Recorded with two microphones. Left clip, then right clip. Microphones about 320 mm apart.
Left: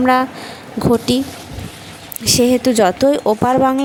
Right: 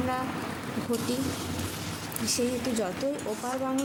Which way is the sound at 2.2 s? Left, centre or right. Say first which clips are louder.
Left 16 dB; left.